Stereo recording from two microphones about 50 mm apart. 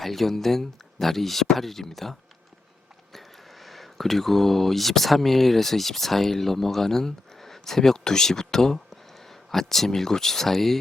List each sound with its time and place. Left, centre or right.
0.0 s speech: centre